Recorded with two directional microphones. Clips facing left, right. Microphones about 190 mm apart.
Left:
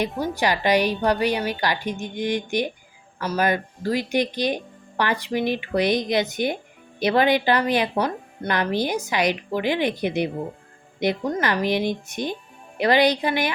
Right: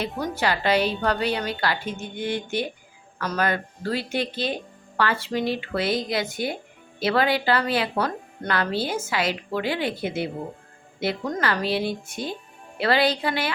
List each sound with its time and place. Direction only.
0.2 s speech: 15° left (ahead or behind)